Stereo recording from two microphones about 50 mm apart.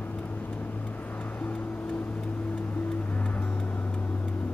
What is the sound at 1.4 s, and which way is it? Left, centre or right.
Music, left.